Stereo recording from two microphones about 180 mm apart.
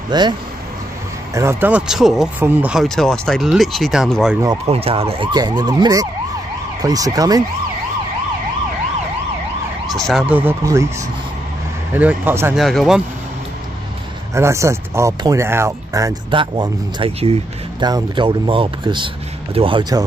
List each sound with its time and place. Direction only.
0.1 s emergency vehicle: 25° right (ahead or behind)
1.3 s speech: 15° right (ahead or behind)
4.6 s emergency vehicle: 35° right (ahead or behind)
9.8 s speech: centre (ahead or behind); by 10.9 s 15° right (ahead or behind)
11.9 s speech: 10° right (ahead or behind)
12.5 s speech: centre (ahead or behind)
14.3 s speech: 15° right (ahead or behind); by 17.8 s 30° right (ahead or behind)
17.8 s emergency vehicle: 25° right (ahead or behind)